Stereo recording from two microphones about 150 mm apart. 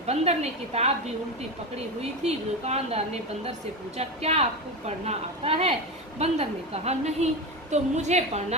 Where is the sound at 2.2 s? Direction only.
45° right (ahead or behind).